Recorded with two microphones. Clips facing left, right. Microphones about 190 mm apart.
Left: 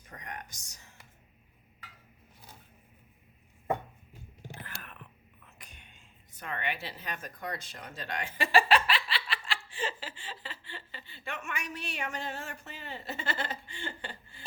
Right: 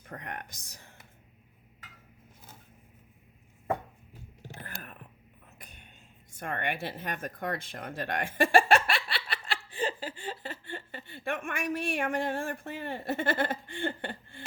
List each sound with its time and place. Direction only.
0.1 s speech: 55° right (ahead or behind)
6.4 s speech: 50° right (ahead or behind)
10.0 s chuckle: 40° right (ahead or behind)